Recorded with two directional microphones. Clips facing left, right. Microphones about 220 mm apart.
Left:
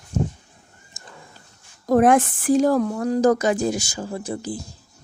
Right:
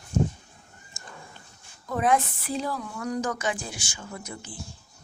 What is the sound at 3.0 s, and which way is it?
Speech, 35° left (ahead or behind).